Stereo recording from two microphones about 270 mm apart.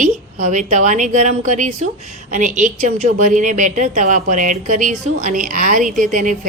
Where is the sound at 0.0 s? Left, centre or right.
Right.